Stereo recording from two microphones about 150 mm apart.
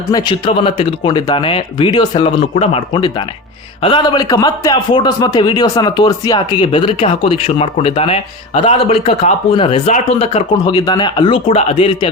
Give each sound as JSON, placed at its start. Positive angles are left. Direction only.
{"t": 0.1, "sound": "a man's voice", "side_deg": 35}
{"t": 10.6, "sound": "a man's voice", "side_deg": 30}